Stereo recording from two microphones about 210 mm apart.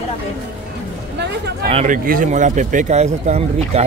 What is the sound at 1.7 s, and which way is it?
Speech, 30° right (ahead or behind).